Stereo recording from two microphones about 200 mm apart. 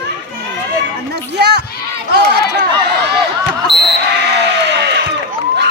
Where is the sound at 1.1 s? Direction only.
55° right (ahead or behind).